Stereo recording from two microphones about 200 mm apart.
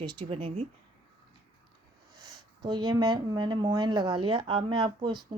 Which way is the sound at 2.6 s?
20° right (ahead or behind).